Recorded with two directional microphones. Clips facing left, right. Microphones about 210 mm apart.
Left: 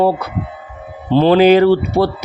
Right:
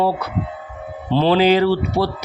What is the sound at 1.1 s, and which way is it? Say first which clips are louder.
Speech: left 5 dB; 50° left (ahead or behind).